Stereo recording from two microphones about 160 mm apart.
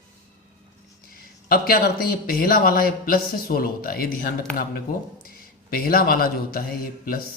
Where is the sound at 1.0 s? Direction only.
65° left (ahead or behind).